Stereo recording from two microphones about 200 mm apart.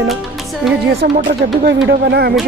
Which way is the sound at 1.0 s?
55° right (ahead or behind).